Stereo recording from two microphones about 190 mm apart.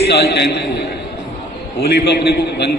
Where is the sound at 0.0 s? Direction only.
60° left (ahead or behind).